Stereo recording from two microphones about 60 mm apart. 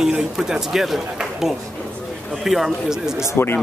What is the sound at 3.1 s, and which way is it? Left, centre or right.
Speech, left.